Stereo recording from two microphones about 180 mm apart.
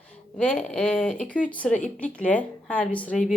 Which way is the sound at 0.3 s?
5° left (ahead or behind).